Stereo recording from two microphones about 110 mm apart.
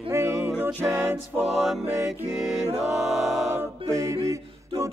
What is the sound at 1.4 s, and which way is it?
Music, 5° right (ahead or behind).